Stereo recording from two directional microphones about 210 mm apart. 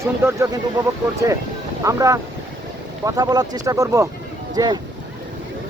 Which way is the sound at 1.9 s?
15° right (ahead or behind).